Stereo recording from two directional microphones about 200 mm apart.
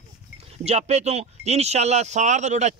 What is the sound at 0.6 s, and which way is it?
Speech, 35° right (ahead or behind).